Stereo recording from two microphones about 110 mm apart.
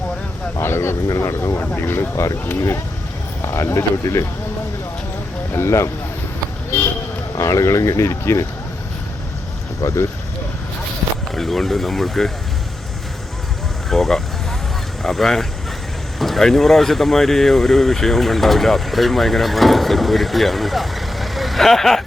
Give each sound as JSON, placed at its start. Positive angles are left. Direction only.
{"t": 0.6, "sound": "speech", "side_deg": 20}
{"t": 5.5, "sound": "speech", "side_deg": 25}
{"t": 7.3, "sound": "speech", "side_deg": 25}
{"t": 9.8, "sound": "speech", "side_deg": 30}
{"t": 11.3, "sound": "speech", "side_deg": 0}
{"t": 13.9, "sound": "speech", "side_deg": 0}